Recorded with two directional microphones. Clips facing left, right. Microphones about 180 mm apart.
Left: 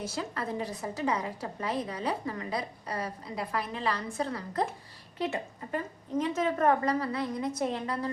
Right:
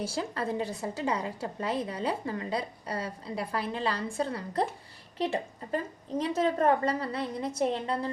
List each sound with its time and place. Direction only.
0.0 s a woman's voice: 30° right (ahead or behind)